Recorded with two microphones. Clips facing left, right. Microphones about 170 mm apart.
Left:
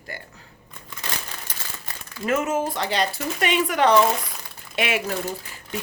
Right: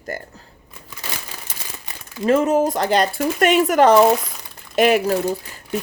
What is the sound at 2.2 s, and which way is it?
Speech, 35° right (ahead or behind).